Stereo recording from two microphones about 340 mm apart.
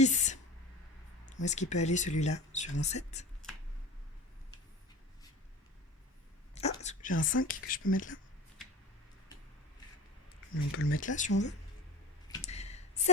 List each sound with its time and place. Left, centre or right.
0.0 s speech: left
1.4 s speech: left
6.5 s whispering: centre
7.2 s speech: left
10.7 s speech: left
11.0 s speech: left
12.3 s a sound: centre